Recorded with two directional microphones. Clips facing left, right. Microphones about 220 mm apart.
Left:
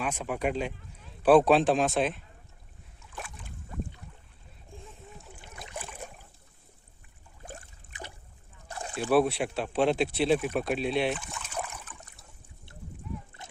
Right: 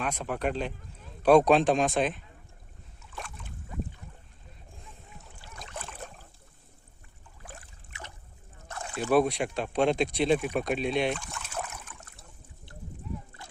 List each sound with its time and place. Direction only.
0.0 s a man's voice: 10° left (ahead or behind)
3.2 s boat: 5° left (ahead or behind)
5.6 s boat: 15° left (ahead or behind)
7.4 s boat: 40° left (ahead or behind)
9.0 s a man's voice: 5° left (ahead or behind)
13.4 s horse: 20° left (ahead or behind)